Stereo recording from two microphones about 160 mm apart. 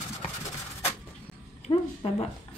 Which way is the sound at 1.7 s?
30° left (ahead or behind).